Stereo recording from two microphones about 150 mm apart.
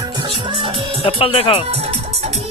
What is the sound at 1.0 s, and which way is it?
Speech, 40° left (ahead or behind).